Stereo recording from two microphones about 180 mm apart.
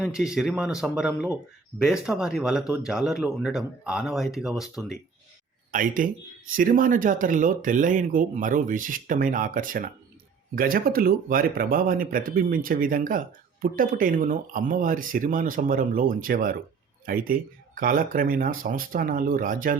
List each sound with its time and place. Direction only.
0.0 s speech: 5° right (ahead or behind)
5.7 s speech: 50° right (ahead or behind)